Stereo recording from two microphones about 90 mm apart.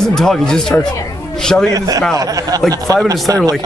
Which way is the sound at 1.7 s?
40° right (ahead or behind).